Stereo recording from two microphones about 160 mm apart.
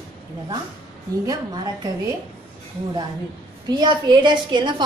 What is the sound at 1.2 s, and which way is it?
Speech, 25° right (ahead or behind).